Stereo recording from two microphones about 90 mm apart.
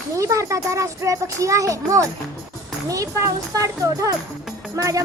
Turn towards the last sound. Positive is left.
turn(degrees=-35)  # may be behind; listen again after turning